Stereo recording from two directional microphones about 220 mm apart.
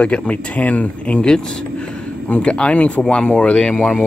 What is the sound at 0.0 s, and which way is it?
Speech, 5° left (ahead or behind).